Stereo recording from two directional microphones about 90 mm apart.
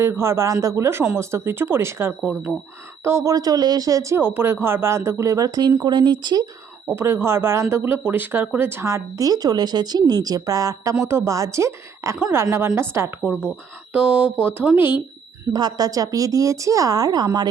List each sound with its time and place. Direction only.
0.0 s speech: 30° right (ahead or behind)
3.3 s speech: 45° right (ahead or behind)
4.2 s speech: 25° right (ahead or behind); by 6.4 s 55° right (ahead or behind)
6.9 s speech: 30° right (ahead or behind)
13.9 s speech: 15° right (ahead or behind)
15.5 s speech: 45° right (ahead or behind)